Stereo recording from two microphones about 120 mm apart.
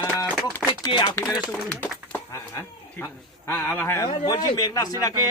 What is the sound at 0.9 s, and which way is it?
Speech, 45° left (ahead or behind).